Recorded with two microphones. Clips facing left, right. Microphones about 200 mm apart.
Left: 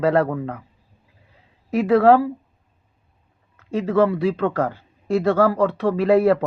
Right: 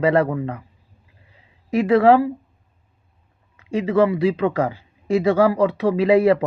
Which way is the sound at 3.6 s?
Centre (ahead or behind).